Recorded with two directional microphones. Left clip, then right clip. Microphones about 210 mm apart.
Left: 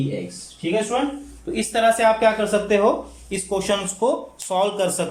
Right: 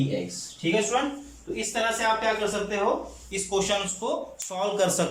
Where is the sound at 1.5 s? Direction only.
55° left (ahead or behind).